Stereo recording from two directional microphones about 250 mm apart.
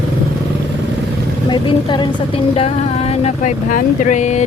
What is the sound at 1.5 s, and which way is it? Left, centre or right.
Speech, centre.